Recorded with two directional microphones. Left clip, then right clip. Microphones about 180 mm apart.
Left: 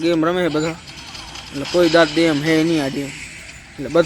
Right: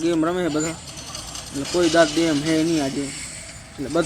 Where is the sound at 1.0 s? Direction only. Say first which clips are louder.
Left 1 dB; 50° right (ahead or behind).